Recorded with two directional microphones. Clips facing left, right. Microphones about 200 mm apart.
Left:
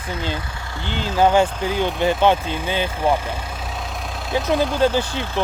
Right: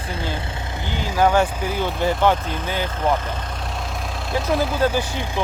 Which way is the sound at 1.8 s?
20° left (ahead or behind).